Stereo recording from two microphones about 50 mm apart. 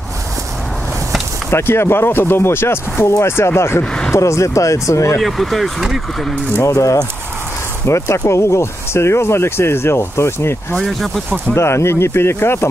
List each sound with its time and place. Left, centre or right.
1.5 s speech: left
4.1 s speech: left
5.2 s speech: centre
6.6 s speech: left
7.8 s speech: left
10.8 s speech: centre
11.5 s speech: left